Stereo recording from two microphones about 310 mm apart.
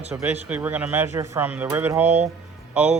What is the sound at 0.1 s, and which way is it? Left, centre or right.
Speech, centre.